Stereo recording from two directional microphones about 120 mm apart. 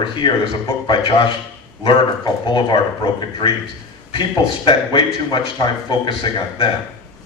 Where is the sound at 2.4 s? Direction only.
40° left (ahead or behind).